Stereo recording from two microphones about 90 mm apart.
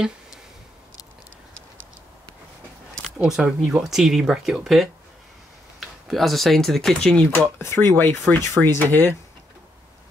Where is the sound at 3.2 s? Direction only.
10° right (ahead or behind).